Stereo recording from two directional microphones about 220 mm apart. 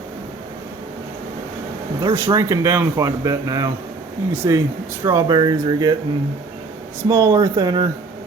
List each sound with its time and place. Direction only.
2.0 s speech: 15° right (ahead or behind)
7.1 s speech: 15° right (ahead or behind)